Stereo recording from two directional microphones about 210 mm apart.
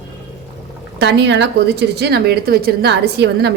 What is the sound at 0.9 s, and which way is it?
A woman's voice, 55° right (ahead or behind).